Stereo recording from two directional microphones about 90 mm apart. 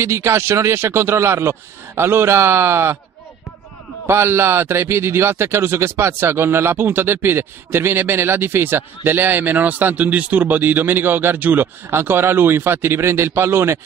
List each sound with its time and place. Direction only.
0.0 s a man's voice: 30° right (ahead or behind)
4.1 s a man's voice: 30° right (ahead or behind)